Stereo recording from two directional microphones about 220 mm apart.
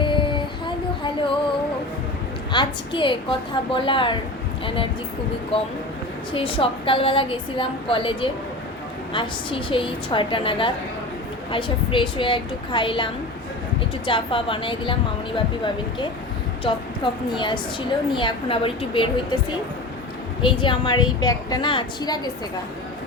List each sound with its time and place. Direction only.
0.0 s a sound: 20° left (ahead or behind)
1.0 s child singing: 25° left (ahead or behind)
2.5 s a woman's voice: 20° left (ahead or behind)
5.5 s a woman's voice: 25° left (ahead or behind)
14.1 s a woman's voice: 25° left (ahead or behind)
16.6 s a woman's voice: 20° left (ahead or behind)
20.4 s a woman's voice: 20° left (ahead or behind)